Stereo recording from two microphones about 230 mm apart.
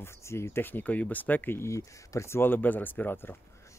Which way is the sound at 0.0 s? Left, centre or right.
Centre.